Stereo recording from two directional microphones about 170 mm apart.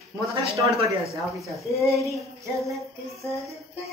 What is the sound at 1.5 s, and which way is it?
Speech, centre (ahead or behind).